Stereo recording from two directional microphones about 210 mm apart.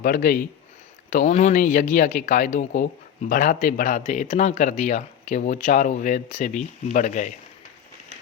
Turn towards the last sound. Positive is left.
turn(degrees=35)  # may be behind; listen again after turning